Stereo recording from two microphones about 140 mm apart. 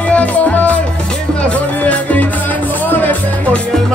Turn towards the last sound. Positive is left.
turn(degrees=10)  # may be behind; listen again after turning